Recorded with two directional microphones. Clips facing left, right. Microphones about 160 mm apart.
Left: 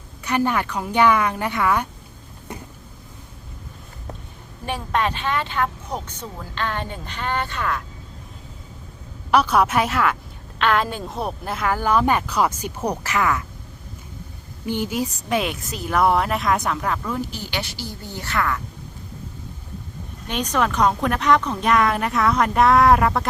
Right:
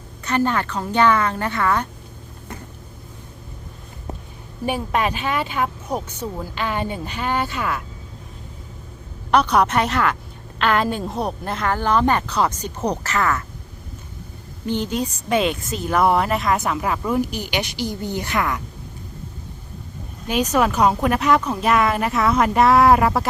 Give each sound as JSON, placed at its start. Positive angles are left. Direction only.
{"t": 0.3, "sound": "a woman's voice", "side_deg": 10}
{"t": 4.6, "sound": "speech", "side_deg": -10}
{"t": 9.3, "sound": "a woman's voice", "side_deg": 5}
{"t": 14.7, "sound": "speech", "side_deg": 10}
{"t": 20.2, "sound": "speech", "side_deg": -10}